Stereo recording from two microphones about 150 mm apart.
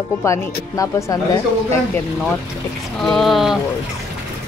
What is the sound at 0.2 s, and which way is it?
Speech, 20° left (ahead or behind).